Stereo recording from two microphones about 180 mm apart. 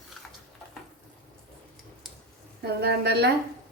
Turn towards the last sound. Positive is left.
turn(degrees=-65)  # may be behind; listen again after turning